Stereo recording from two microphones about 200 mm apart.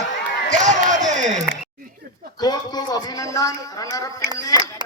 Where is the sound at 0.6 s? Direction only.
35° right (ahead or behind).